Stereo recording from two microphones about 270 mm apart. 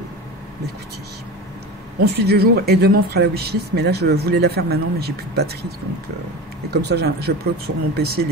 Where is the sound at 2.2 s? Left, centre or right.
Right.